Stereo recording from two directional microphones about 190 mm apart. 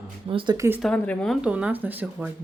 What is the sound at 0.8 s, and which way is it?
Speech, 5° left (ahead or behind).